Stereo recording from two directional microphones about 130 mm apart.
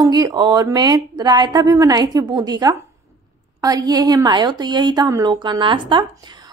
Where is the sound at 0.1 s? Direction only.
30° right (ahead or behind).